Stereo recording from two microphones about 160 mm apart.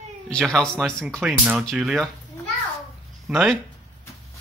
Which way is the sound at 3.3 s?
Centre (ahead or behind).